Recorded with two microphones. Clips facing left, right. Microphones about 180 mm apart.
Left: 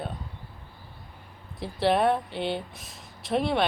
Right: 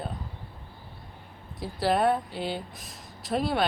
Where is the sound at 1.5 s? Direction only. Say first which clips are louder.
Left 2 dB; centre (ahead or behind).